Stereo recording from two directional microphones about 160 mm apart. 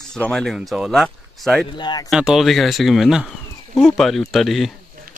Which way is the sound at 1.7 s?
30° left (ahead or behind).